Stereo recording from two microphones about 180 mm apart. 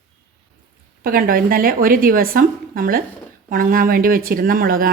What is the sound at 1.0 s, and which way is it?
Speech, 55° right (ahead or behind).